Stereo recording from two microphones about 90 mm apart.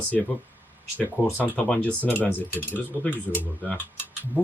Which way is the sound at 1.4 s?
15° left (ahead or behind).